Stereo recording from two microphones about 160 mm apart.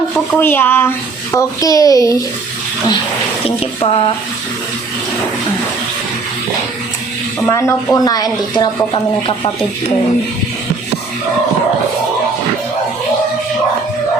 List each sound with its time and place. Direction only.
0.3 s a child's voice: 15° left (ahead or behind)
3.4 s speech: 35° left (ahead or behind)
7.4 s a child's voice: 20° left (ahead or behind)